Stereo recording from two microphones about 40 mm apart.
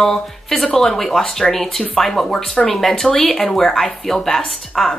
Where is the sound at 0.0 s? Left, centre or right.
Centre.